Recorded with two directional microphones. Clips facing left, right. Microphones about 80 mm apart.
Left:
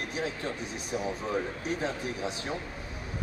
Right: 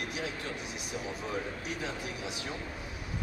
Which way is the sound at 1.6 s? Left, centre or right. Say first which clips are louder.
Left 5 dB; left.